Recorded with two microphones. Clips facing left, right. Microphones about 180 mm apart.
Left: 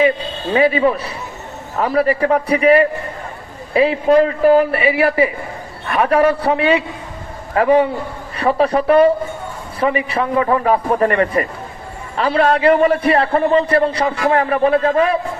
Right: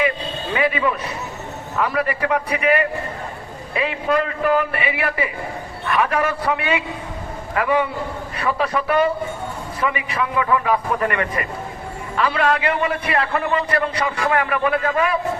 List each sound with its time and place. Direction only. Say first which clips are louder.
0.5 s a man's voice: left 7 dB; 30° left (ahead or behind)